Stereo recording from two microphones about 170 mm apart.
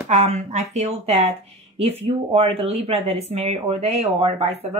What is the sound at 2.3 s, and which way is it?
Speech, 35° right (ahead or behind).